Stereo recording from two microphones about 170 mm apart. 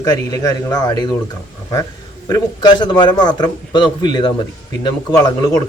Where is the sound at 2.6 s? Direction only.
25° left (ahead or behind).